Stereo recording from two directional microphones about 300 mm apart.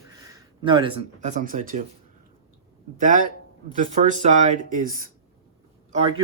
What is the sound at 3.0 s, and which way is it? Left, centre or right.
Speech, right.